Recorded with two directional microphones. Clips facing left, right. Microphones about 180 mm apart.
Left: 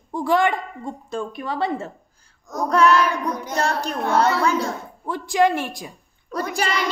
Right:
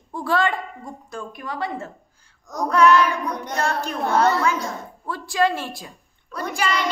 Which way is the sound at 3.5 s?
35° left (ahead or behind).